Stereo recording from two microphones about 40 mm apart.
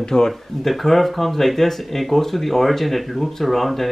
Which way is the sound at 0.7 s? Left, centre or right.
Centre.